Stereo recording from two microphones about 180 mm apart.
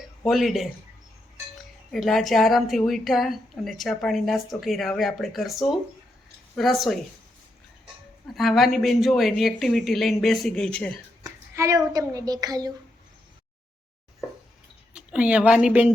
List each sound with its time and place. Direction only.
0.3 s a woman's voice: centre (ahead or behind)
1.9 s a woman's voice: centre (ahead or behind)
8.3 s a woman's voice: centre (ahead or behind)
11.2 s a child's voice: 15° right (ahead or behind)
14.9 s a woman's voice: 5° right (ahead or behind)